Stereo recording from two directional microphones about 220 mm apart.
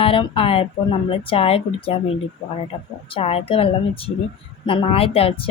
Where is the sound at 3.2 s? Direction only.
25° left (ahead or behind).